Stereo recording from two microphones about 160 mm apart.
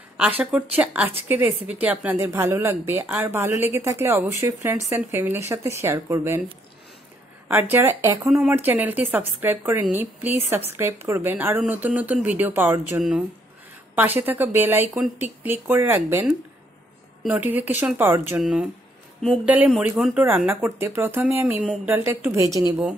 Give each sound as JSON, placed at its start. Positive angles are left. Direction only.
{"t": 0.2, "sound": "a woman's voice", "side_deg": -5}
{"t": 7.7, "sound": "a woman's voice", "side_deg": -15}